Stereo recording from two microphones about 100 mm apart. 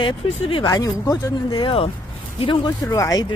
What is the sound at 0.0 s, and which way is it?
Speech, 60° left (ahead or behind).